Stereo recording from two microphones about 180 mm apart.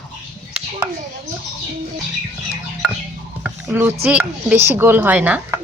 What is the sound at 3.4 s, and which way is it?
Speech, 5° right (ahead or behind).